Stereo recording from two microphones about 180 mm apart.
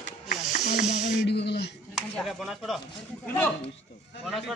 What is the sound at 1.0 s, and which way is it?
Speech, 70° left (ahead or behind).